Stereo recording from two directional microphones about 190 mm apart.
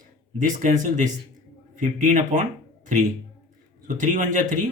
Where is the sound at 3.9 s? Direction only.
40° right (ahead or behind).